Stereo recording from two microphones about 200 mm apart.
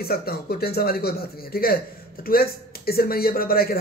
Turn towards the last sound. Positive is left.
turn(degrees=50)  # may be behind; listen again after turning